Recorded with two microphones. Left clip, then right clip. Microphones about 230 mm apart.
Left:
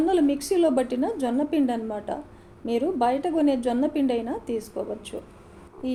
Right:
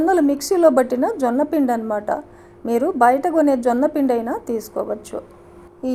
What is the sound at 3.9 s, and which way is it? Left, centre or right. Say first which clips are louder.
Speech: right 6 dB; right.